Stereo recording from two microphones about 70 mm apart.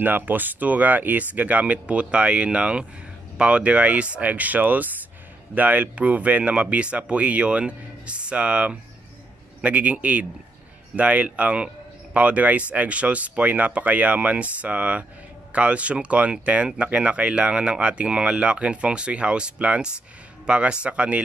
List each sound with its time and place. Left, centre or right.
0.0 s speech: right